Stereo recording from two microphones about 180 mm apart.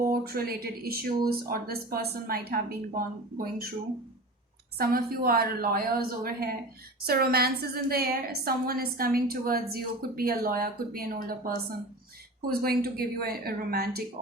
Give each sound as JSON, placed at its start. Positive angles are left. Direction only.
{"t": 0.1, "sound": "a woman's voice", "side_deg": -55}
{"t": 4.8, "sound": "a woman's voice", "side_deg": -55}
{"t": 12.6, "sound": "a woman's voice", "side_deg": -60}